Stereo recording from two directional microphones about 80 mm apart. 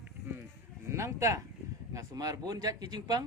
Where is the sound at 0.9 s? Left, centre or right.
Right.